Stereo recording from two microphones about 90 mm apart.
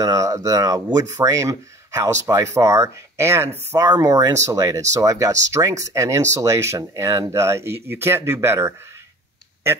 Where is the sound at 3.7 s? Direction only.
45° right (ahead or behind); by 8.8 s 30° right (ahead or behind).